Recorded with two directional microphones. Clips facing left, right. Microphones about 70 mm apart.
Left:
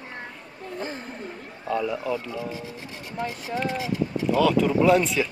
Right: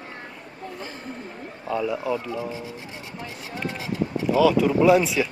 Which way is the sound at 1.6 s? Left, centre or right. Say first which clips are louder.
Right 1 dB; centre.